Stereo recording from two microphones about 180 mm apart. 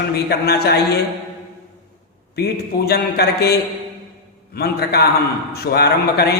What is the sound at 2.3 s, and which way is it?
A man's voice, 65° left (ahead or behind).